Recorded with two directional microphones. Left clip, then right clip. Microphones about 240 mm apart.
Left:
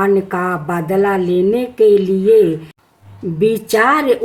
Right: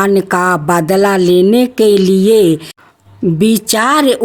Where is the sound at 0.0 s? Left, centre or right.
Right.